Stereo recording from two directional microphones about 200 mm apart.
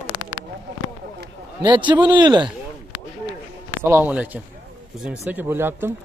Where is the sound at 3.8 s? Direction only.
10° right (ahead or behind).